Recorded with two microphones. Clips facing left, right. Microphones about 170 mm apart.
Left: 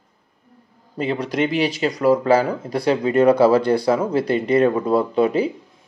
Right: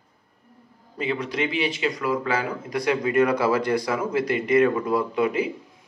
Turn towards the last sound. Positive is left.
turn(degrees=30)  # may be behind; listen again after turning